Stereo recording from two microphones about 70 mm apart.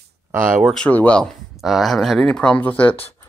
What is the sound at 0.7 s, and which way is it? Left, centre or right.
Speech, centre.